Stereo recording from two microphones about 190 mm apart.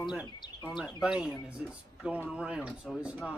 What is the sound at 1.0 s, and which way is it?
Speech, 5° right (ahead or behind).